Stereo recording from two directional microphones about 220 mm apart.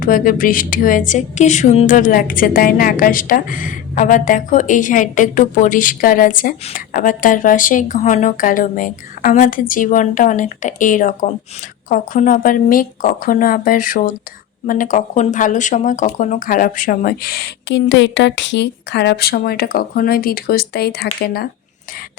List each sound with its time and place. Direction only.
0.0 s a woman's voice: 40° left (ahead or behind)